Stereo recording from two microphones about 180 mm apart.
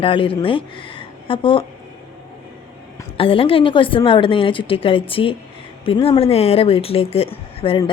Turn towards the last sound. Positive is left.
turn(degrees=30)  # may be behind; listen again after turning